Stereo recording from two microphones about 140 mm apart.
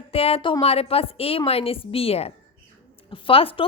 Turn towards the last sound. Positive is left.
turn(degrees=40)  # may be behind; listen again after turning